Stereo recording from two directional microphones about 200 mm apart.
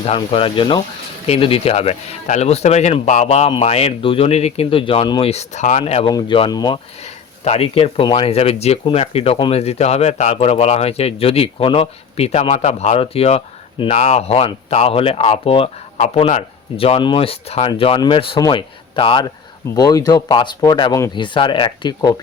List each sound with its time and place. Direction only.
0.0 s speech: 25° left (ahead or behind)